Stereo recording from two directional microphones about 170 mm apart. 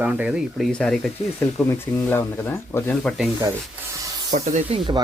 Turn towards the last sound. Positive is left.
turn(degrees=-40)  # may be behind; listen again after turning